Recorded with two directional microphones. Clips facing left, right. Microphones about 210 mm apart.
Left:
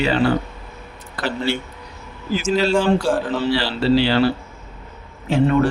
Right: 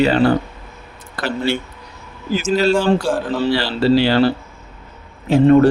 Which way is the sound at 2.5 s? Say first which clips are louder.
Right 2 dB; centre (ahead or behind).